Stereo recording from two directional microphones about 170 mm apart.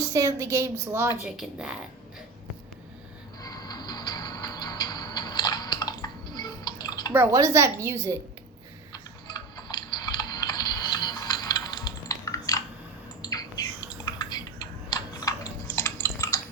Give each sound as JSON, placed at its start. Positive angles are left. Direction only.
{"t": 0.1, "sound": "a woman's voice", "side_deg": -20}
{"t": 1.2, "sound": "speech", "side_deg": -5}
{"t": 3.4, "sound": "music", "side_deg": 25}
{"t": 7.1, "sound": "a woman's voice", "side_deg": -15}
{"t": 8.9, "sound": "a sound", "side_deg": 25}